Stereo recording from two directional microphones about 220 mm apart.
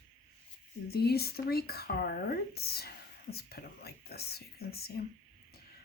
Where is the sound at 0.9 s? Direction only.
45° left (ahead or behind).